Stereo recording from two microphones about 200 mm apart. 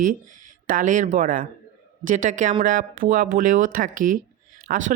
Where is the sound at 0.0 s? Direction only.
40° right (ahead or behind).